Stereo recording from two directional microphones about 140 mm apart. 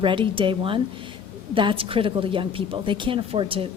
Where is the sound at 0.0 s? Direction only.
35° right (ahead or behind).